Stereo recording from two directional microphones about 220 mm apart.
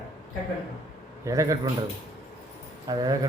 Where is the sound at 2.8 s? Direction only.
20° right (ahead or behind).